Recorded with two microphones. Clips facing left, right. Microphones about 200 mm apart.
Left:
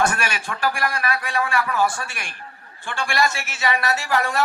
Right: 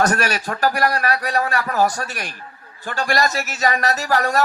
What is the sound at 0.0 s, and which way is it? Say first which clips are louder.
A man's voice: right 4 dB; 40° right (ahead or behind).